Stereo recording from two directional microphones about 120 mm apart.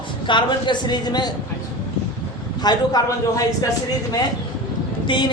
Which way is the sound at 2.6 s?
35° left (ahead or behind).